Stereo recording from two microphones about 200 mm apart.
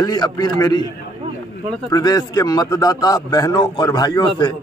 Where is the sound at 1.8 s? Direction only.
20° left (ahead or behind).